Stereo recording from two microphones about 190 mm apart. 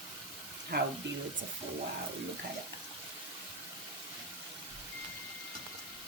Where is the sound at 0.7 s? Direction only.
55° right (ahead or behind).